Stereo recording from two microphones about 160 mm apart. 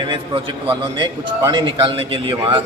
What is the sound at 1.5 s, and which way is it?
A man's voice, 30° right (ahead or behind).